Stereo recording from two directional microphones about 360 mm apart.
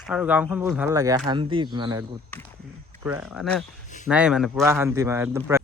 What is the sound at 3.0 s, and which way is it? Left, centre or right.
Speech, centre.